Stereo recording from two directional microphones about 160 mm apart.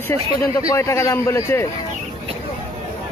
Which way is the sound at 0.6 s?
15° left (ahead or behind).